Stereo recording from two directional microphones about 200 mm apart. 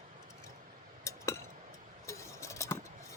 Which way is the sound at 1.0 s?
15° left (ahead or behind).